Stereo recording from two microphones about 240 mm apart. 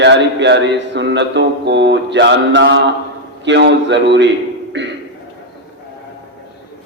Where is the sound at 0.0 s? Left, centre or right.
Right.